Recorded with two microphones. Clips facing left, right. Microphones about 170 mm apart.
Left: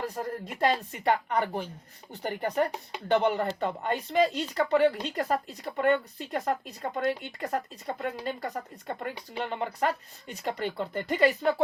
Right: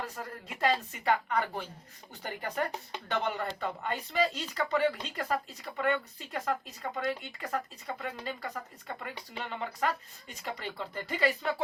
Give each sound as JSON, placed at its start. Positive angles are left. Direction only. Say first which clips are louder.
{"t": 0.0, "sound": "speech", "louder": "left 7 dB", "side_deg": 35}
{"t": 3.6, "sound": "speech", "louder": "left 5 dB", "side_deg": 50}